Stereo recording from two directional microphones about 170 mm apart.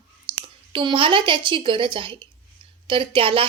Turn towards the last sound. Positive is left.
turn(degrees=-30)  # may be behind; listen again after turning